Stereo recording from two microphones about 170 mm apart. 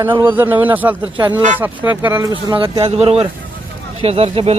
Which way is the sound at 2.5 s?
30° right (ahead or behind).